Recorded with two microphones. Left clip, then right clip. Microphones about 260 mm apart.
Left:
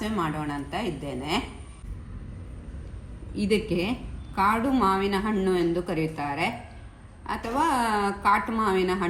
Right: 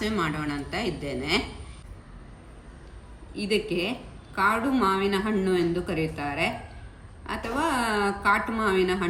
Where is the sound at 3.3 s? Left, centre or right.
Centre.